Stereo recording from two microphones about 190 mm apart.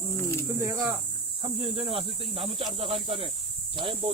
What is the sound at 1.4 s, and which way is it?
Speech, 30° right (ahead or behind).